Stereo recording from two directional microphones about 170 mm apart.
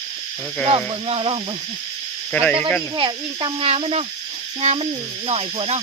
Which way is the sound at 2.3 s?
10° left (ahead or behind).